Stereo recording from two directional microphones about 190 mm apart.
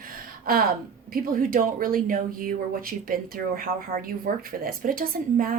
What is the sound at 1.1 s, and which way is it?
Speech, 50° right (ahead or behind).